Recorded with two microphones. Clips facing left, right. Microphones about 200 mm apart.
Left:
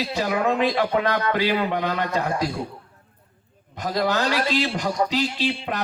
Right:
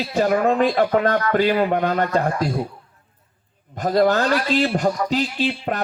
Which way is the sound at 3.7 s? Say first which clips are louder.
Right 6 dB; 45° right (ahead or behind).